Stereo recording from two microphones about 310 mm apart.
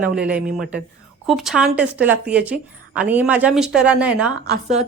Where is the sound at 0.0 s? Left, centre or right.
Centre.